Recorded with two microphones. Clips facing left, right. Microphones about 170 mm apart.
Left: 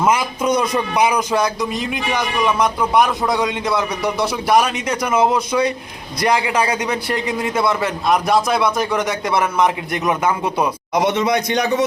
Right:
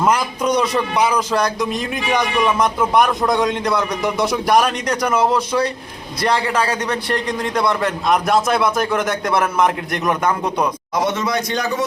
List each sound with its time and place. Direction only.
0.0 s speech: 5° left (ahead or behind)
10.9 s a man's voice: 20° left (ahead or behind)